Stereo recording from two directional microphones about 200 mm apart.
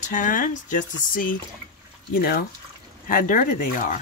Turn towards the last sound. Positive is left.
turn(degrees=40)  # may be behind; listen again after turning